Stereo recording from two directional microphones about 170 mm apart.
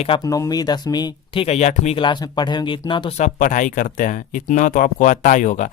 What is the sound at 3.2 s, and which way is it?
Speech, 45° left (ahead or behind).